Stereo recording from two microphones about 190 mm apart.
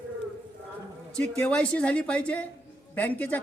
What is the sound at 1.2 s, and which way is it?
A woman's voice, 5° left (ahead or behind).